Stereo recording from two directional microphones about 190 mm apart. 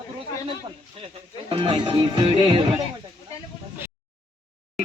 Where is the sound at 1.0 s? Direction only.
25° right (ahead or behind).